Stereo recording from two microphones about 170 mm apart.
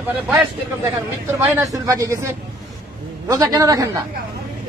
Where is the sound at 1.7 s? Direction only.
20° right (ahead or behind).